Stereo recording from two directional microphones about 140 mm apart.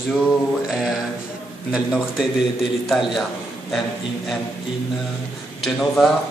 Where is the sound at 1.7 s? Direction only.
5° right (ahead or behind).